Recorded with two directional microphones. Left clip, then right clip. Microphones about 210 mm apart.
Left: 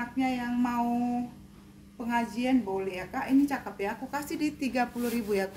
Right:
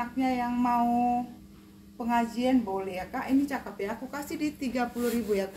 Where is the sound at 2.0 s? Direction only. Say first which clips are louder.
Right 2 dB; 15° left (ahead or behind).